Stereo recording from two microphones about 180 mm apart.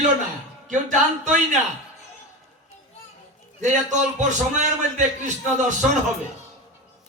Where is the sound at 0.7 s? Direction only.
40° right (ahead or behind).